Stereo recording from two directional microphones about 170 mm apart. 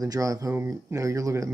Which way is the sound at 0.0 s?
20° right (ahead or behind).